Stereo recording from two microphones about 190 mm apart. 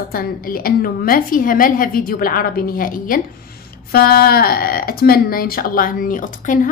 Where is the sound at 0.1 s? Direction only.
50° left (ahead or behind).